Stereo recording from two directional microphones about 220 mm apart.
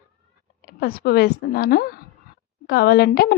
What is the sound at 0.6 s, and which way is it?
Speech, 45° left (ahead or behind).